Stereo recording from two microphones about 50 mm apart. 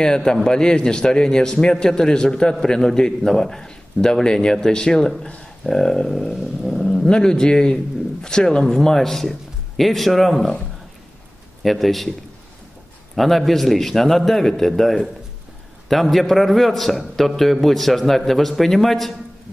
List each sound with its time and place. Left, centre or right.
0.0 s a man's voice: centre
5.7 s a man's voice: centre
7.1 s a man's voice: centre
11.6 s a man's voice: centre
13.1 s a man's voice: centre